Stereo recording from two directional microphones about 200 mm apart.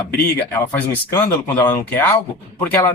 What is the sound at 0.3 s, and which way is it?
Speech, 10° left (ahead or behind).